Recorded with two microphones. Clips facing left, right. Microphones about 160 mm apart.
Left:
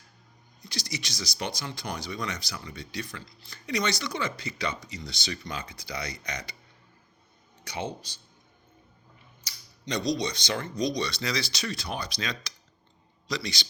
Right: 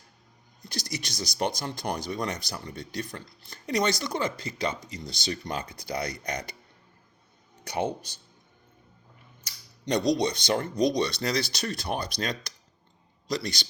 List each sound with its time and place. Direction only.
0.6 s speech: 50° right (ahead or behind)
7.6 s speech: 55° right (ahead or behind)
9.4 s a man's voice: 55° right (ahead or behind)